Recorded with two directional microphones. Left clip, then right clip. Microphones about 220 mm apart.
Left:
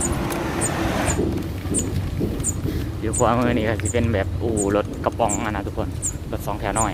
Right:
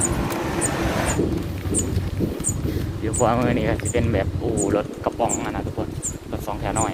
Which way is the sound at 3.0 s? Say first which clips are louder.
Left 1 dB; 5° left (ahead or behind).